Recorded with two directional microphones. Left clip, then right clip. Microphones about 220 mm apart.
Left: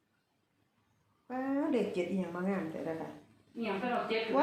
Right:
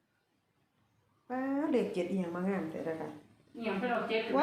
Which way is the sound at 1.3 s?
15° right (ahead or behind).